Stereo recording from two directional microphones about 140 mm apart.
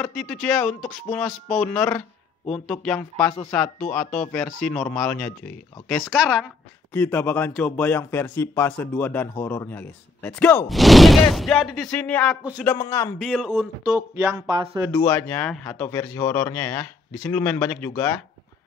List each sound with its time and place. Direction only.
0.0 s speech: 5° left (ahead or behind)
6.9 s speech: 15° left (ahead or behind)
10.7 s speech: centre (ahead or behind)
12.7 s a man's voice: 25° left (ahead or behind)
13.2 s speech: centre (ahead or behind)
14.9 s a man's voice: 20° left (ahead or behind)
15.2 s speech: 10° left (ahead or behind)